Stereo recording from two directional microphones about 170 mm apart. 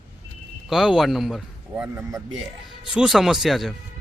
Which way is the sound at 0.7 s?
Centre (ahead or behind).